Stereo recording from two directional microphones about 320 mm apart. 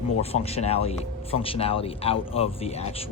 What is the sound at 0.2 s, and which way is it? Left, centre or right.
Speech, centre.